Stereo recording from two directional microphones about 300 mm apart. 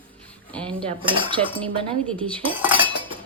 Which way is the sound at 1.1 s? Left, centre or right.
Centre.